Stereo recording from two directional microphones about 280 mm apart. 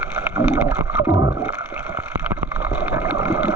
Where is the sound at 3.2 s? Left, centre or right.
Centre.